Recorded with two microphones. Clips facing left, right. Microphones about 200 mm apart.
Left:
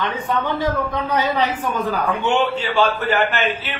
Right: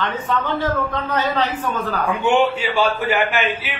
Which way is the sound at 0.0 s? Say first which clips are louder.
Even; 15° left (ahead or behind).